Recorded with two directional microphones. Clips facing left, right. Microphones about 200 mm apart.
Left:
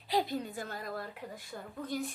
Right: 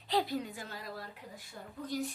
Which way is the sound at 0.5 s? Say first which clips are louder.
Left 4 dB; 50° left (ahead or behind).